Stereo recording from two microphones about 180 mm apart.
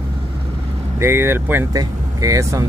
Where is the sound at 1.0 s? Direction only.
15° right (ahead or behind).